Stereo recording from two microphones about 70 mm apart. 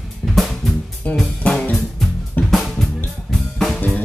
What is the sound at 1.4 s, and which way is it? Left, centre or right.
Music, centre.